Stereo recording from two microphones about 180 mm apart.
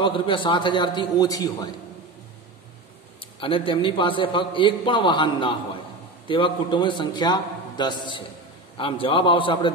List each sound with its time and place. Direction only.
0.0 s a man's voice: 25° left (ahead or behind)
3.3 s a man's voice: 30° left (ahead or behind)